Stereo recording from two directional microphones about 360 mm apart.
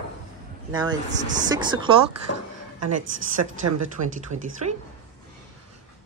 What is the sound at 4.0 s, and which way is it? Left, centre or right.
Speech, right.